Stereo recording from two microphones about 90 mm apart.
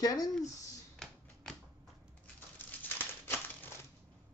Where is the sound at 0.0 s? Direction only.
45° left (ahead or behind).